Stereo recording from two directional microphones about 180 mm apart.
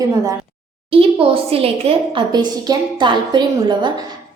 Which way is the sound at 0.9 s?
30° right (ahead or behind).